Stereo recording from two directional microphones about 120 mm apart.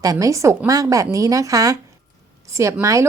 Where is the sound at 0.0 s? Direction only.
30° right (ahead or behind).